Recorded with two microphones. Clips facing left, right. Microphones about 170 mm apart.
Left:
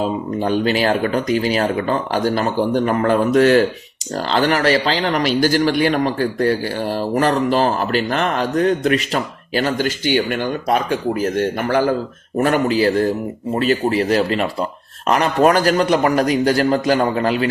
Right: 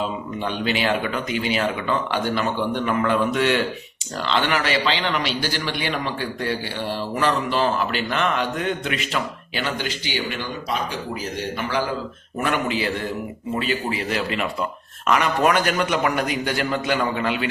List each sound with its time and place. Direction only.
0.0 s a man's voice: 40° left (ahead or behind)